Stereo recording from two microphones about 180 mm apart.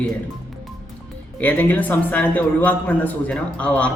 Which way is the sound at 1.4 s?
10° left (ahead or behind).